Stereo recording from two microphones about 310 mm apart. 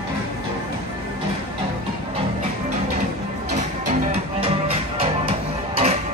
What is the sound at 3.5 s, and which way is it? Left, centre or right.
Music, right.